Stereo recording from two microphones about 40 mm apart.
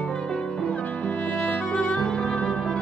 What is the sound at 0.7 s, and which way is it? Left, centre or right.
Music, left.